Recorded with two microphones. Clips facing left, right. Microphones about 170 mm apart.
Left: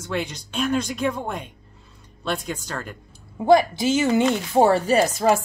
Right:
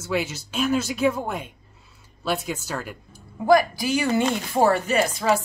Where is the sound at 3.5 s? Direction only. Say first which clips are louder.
Left 2 dB; 25° left (ahead or behind); by 5.4 s 45° left (ahead or behind).